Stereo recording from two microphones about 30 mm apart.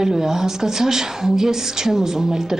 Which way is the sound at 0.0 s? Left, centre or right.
Centre.